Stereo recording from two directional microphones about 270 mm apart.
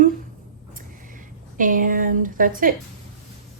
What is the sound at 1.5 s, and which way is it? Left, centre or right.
Speech, right.